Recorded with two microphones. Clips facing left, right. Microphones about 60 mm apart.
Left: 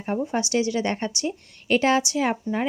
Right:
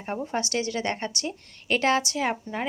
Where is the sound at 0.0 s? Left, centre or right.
Centre.